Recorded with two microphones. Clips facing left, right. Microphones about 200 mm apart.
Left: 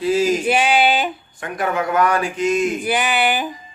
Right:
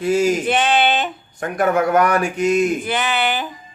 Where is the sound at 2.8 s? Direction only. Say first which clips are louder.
Left 2 dB; 15° left (ahead or behind).